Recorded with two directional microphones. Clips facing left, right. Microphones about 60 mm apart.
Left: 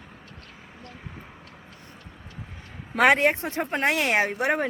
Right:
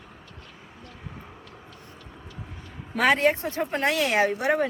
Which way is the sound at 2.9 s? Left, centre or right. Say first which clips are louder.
Left 2 dB; left.